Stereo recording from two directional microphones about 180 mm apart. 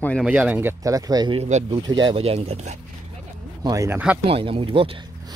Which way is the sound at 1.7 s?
25° right (ahead or behind).